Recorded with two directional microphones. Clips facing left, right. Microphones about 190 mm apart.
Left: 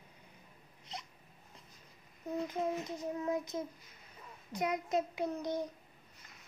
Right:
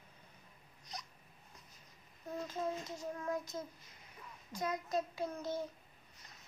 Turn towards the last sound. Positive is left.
turn(degrees=15)  # may be behind; listen again after turning